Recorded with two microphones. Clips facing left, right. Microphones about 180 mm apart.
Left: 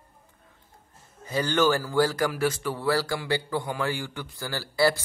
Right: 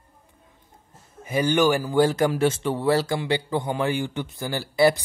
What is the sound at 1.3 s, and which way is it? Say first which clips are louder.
Speech: right 3 dB; 15° right (ahead or behind).